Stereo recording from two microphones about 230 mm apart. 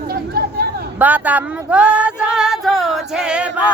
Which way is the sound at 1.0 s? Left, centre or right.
Centre.